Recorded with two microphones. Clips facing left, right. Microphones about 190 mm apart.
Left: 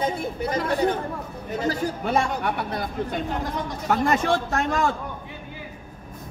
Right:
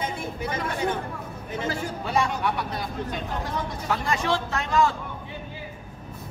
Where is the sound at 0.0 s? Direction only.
35° left (ahead or behind).